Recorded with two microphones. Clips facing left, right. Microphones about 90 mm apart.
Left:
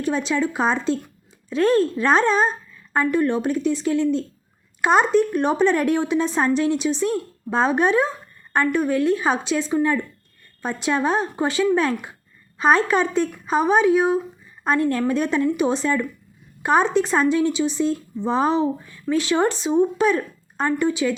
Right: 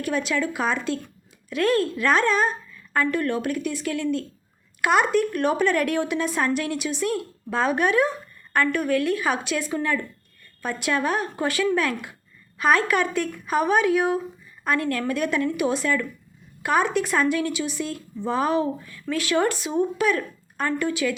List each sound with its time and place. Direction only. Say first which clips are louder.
0.0 s speech: left 3 dB; 25° left (ahead or behind)